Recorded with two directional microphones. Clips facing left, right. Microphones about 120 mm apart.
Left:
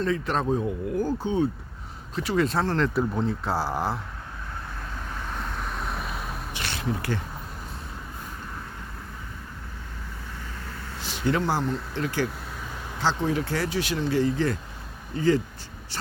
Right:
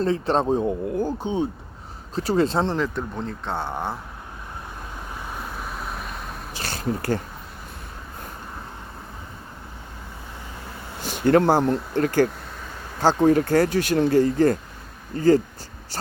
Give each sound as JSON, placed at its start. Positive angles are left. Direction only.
{"t": 0.0, "sound": "speech", "side_deg": -30}
{"t": 2.1, "sound": "speech", "side_deg": -35}
{"t": 2.9, "sound": "speech", "side_deg": 5}
{"t": 5.2, "sound": "vehicle", "side_deg": -10}
{"t": 6.5, "sound": "a sound", "side_deg": -40}
{"t": 11.0, "sound": "speech", "side_deg": -50}